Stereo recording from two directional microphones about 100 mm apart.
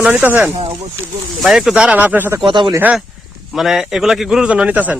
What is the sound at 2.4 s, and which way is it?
Speech, 55° right (ahead or behind).